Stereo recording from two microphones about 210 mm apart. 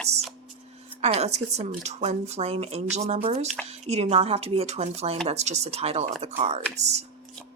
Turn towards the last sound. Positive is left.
turn(degrees=-30)  # may be behind; listen again after turning